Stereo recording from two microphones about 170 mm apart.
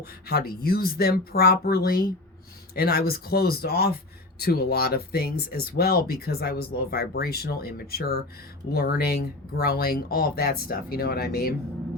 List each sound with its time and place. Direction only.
0.0 s speech: 65° left (ahead or behind)